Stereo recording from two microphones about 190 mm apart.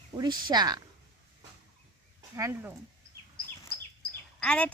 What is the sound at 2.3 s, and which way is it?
Speech, 15° right (ahead or behind).